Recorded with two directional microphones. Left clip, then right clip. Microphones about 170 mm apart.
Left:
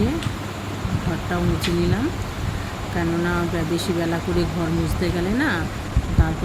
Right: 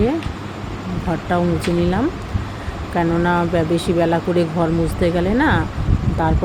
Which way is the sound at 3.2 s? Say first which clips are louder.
Right 6 dB; 15° right (ahead or behind).